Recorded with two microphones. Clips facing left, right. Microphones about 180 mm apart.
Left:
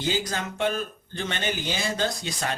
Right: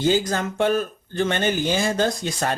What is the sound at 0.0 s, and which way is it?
Speech, 45° right (ahead or behind).